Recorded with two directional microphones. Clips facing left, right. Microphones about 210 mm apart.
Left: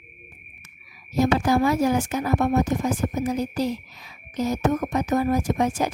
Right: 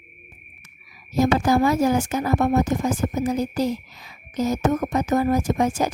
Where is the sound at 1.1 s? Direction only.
45° right (ahead or behind).